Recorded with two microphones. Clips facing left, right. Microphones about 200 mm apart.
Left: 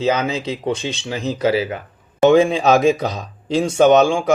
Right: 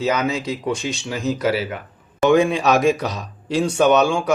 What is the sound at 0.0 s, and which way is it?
Speech, 25° left (ahead or behind).